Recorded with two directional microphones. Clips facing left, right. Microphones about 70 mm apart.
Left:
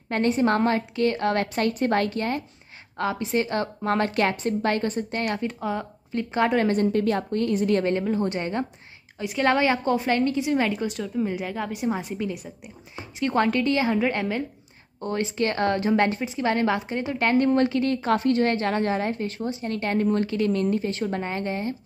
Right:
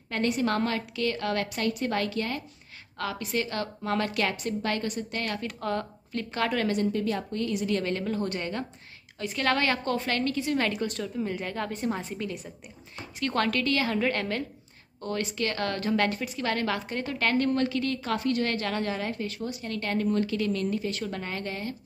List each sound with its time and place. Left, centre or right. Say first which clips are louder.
0.1 s a woman's voice: left 5 dB; left
3.0 s a woman's voice: left 6 dB; left
5.2 s a woman's voice: left 6 dB; left
5.6 s speech: left 2 dB; centre
6.3 s a woman's voice: left 6 dB; left
6.7 s a woman's voice: left 5 dB; left
8.0 s a woman's voice: left 5 dB; left
10.8 s a woman's voice: left 4 dB; centre
15.0 s a woman's voice: left 5 dB; left